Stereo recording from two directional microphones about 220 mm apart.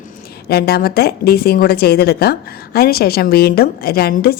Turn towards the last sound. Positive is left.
turn(degrees=45)  # may be behind; listen again after turning